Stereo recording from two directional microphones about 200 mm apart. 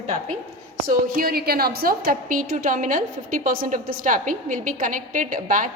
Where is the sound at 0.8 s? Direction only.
45° right (ahead or behind).